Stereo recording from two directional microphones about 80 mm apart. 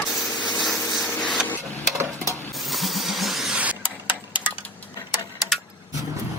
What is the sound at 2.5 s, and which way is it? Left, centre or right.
Vehicle, centre.